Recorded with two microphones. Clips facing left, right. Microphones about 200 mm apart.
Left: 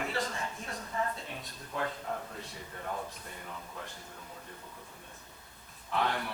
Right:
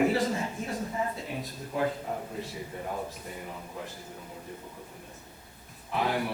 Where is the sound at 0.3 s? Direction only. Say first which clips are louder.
Right 7 dB; 25° right (ahead or behind).